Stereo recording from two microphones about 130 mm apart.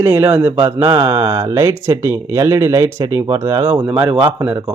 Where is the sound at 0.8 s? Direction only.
35° right (ahead or behind).